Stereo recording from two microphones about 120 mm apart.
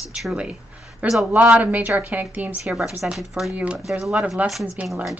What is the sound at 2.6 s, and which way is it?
Speech, 5° right (ahead or behind).